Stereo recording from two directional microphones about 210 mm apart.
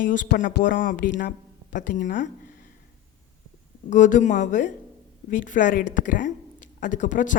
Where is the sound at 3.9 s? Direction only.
35° left (ahead or behind).